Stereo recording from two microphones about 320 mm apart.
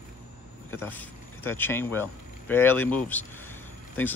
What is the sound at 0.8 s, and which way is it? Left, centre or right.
Speech, centre.